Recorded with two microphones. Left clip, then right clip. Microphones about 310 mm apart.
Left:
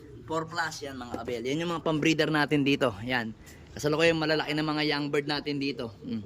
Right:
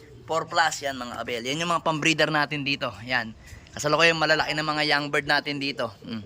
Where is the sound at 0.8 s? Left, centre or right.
Centre.